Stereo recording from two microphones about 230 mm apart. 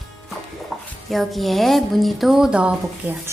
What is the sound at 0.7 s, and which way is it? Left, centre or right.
Music, centre.